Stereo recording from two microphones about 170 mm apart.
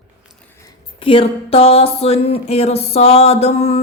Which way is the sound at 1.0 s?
30° left (ahead or behind).